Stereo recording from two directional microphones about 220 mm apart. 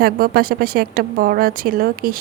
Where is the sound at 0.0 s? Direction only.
45° right (ahead or behind).